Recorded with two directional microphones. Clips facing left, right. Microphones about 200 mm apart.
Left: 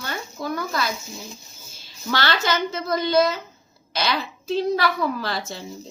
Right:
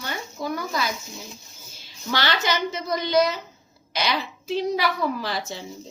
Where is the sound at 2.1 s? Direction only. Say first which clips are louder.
Left 1 dB; 15° right (ahead or behind).